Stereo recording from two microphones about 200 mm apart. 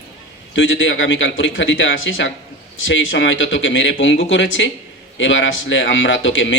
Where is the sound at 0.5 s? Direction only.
70° left (ahead or behind).